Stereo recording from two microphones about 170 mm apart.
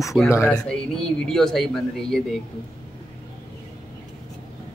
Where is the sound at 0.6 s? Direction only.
5° left (ahead or behind).